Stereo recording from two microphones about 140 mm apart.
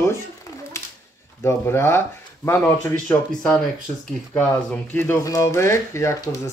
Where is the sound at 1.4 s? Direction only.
20° left (ahead or behind).